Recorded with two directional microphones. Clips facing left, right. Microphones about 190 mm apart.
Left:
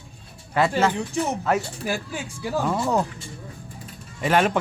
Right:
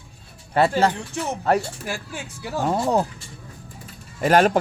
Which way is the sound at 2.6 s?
30° right (ahead or behind).